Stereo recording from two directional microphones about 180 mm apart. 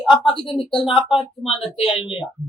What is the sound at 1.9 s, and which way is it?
Speech, 30° left (ahead or behind).